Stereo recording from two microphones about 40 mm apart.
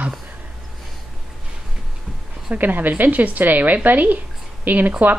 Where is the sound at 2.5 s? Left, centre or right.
Right.